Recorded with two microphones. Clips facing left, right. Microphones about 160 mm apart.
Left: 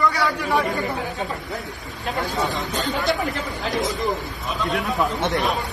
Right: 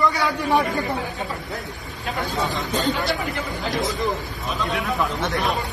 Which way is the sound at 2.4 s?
Centre (ahead or behind).